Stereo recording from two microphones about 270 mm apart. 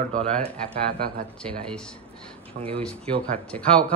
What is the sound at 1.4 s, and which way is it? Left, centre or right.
Speech, centre.